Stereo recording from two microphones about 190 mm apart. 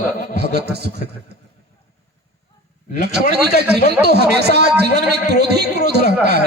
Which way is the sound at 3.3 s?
60° right (ahead or behind).